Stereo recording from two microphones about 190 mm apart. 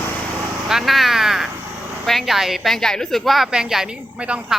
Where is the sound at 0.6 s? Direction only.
Centre (ahead or behind).